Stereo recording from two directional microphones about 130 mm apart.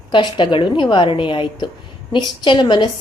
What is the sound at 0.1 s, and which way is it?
A woman's voice, 35° left (ahead or behind).